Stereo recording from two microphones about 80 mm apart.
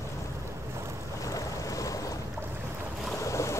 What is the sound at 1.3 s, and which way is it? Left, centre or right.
Boat, left.